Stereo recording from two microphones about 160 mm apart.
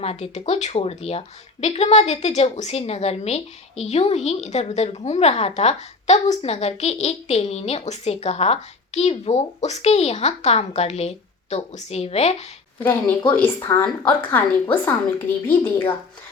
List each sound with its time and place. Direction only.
0.0 s a woman's voice: 40° left (ahead or behind)
12.8 s a woman's voice: 15° left (ahead or behind)